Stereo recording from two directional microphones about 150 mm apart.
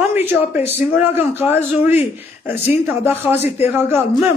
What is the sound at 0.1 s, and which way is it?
A man's voice, 15° right (ahead or behind).